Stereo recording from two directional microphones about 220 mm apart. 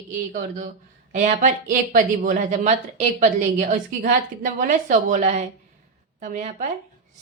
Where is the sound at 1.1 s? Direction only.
35° right (ahead or behind).